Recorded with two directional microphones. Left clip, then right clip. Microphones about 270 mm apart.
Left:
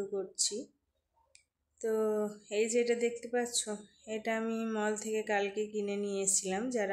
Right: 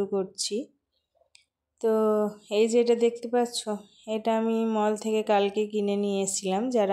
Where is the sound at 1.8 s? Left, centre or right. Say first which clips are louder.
Right 8 dB; right.